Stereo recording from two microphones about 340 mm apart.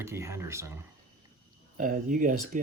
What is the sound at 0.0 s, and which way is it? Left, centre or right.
Speech, centre.